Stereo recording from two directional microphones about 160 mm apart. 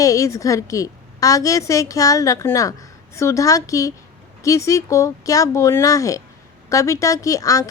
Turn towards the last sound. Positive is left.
turn(degrees=20)  # may be behind; listen again after turning